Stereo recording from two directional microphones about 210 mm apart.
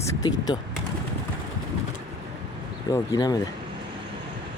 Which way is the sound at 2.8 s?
15° left (ahead or behind).